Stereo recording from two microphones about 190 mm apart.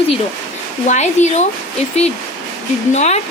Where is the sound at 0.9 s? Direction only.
40° left (ahead or behind).